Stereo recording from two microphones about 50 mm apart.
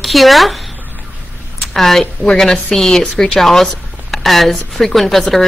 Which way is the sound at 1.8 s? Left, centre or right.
Centre.